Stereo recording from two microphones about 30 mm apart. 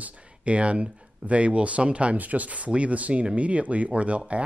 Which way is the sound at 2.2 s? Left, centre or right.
Right.